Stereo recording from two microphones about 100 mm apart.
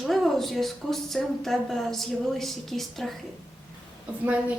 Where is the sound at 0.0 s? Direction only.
Centre (ahead or behind).